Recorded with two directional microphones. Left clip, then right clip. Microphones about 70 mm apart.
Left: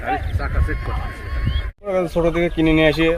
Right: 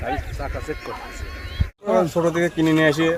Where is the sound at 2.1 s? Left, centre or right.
Right.